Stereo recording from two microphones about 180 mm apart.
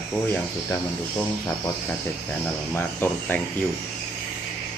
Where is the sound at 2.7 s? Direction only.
10° left (ahead or behind).